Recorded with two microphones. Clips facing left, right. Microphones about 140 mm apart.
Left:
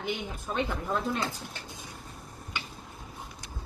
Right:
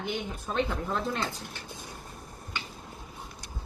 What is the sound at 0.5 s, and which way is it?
Speech, 5° left (ahead or behind).